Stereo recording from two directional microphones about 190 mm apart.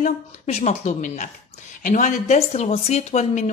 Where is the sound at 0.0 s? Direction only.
35° left (ahead or behind).